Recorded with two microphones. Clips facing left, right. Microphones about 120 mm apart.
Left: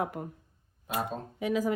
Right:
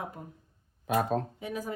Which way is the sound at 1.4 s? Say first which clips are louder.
Left 7 dB; 90° left.